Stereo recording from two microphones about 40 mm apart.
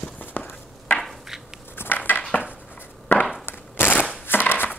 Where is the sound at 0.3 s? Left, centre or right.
Left.